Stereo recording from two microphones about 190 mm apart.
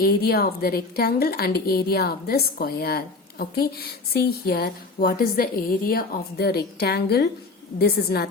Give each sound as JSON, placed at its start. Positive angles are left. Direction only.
{"t": 0.0, "sound": "a woman's voice", "side_deg": 55}